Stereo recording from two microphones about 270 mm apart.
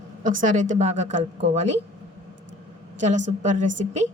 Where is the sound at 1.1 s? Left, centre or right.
Right.